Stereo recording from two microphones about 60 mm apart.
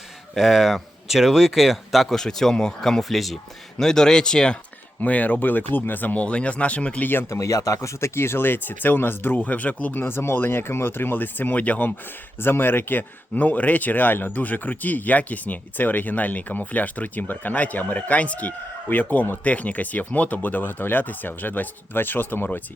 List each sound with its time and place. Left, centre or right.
0.3 s speech: centre
4.9 s speech: left
7.3 s speech: left
10.0 s speech: left
12.4 s speech: left